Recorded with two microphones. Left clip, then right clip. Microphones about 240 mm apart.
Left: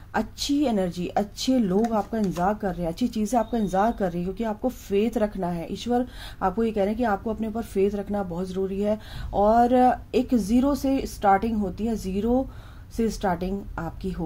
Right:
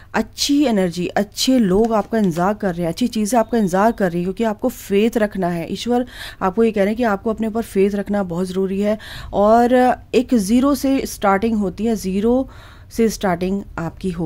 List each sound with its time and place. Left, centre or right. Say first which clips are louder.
0.1 s speech: right 7 dB; right